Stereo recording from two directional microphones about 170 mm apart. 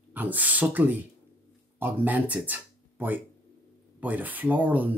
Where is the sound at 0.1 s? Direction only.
10° right (ahead or behind).